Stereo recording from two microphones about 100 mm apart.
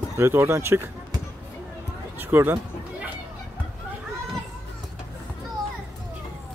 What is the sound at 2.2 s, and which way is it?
Speech, 20° right (ahead or behind).